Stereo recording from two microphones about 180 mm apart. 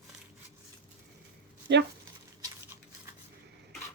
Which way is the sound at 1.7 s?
75° right (ahead or behind).